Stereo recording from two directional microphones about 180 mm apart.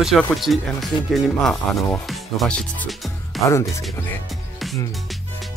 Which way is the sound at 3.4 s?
15° left (ahead or behind).